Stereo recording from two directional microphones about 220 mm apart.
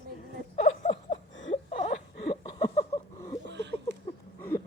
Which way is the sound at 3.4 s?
50° right (ahead or behind).